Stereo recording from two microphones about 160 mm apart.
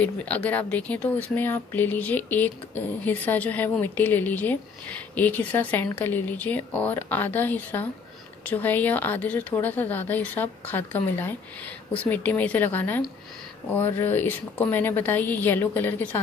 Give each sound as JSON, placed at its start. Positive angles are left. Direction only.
{"t": 0.0, "sound": "speech", "side_deg": 10}